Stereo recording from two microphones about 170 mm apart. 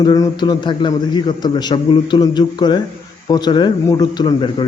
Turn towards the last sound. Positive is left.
turn(degrees=25)  # may be behind; listen again after turning